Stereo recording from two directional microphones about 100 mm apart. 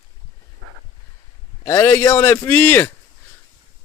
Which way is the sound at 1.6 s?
25° left (ahead or behind).